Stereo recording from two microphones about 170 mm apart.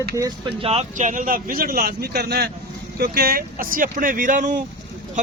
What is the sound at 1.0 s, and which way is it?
Speech, 50° right (ahead or behind).